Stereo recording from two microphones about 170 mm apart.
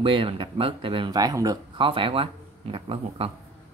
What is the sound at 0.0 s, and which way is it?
Speech, 30° right (ahead or behind).